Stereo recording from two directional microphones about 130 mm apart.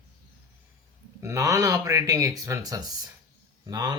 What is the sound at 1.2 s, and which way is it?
Speech, 25° right (ahead or behind).